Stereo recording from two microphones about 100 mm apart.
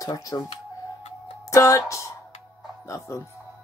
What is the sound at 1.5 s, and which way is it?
Speech, 35° left (ahead or behind).